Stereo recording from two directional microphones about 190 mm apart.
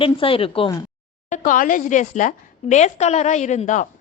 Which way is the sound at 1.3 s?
45° left (ahead or behind).